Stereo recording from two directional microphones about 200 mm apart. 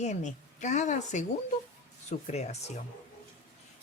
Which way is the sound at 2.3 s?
35° left (ahead or behind).